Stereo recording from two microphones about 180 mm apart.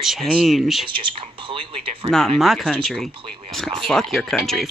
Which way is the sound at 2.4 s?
Centre (ahead or behind).